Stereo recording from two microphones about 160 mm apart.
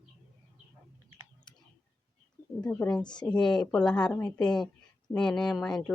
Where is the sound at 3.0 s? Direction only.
25° left (ahead or behind).